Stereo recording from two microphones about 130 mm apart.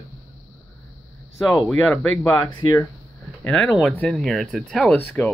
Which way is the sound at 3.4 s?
10° left (ahead or behind).